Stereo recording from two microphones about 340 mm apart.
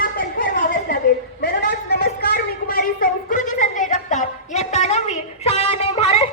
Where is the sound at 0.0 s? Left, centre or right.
Left.